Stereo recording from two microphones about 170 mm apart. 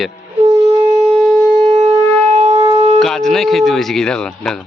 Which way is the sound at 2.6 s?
30° right (ahead or behind).